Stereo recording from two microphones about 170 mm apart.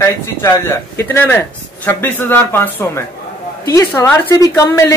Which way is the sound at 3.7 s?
15° left (ahead or behind).